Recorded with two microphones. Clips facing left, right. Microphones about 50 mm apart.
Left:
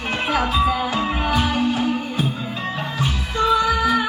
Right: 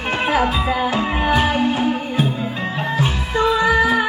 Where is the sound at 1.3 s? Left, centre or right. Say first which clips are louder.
Right 4 dB; right.